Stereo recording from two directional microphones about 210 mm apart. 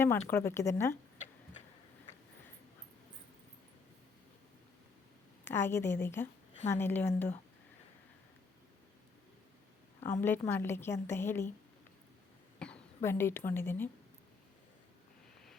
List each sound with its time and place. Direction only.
0.3 s a woman's voice: 10° left (ahead or behind)
5.5 s a woman's voice: 10° left (ahead or behind)
10.0 s a woman's voice: 10° left (ahead or behind)
12.5 s speech: 5° left (ahead or behind)